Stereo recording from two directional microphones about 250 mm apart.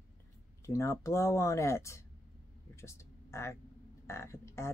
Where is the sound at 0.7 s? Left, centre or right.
Centre.